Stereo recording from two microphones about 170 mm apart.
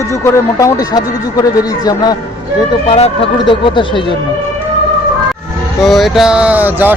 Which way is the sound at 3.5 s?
30° left (ahead or behind).